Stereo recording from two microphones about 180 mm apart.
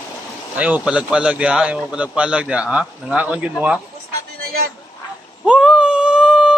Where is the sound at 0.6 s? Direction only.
10° right (ahead or behind).